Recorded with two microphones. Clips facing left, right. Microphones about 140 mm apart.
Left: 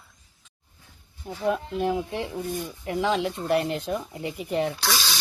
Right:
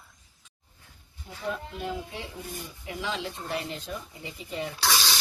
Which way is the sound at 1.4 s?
65° left (ahead or behind).